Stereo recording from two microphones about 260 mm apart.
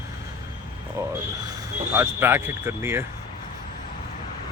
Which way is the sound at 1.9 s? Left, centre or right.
Centre.